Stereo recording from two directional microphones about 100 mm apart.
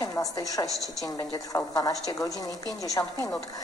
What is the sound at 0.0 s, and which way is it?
A woman's voice, 35° left (ahead or behind).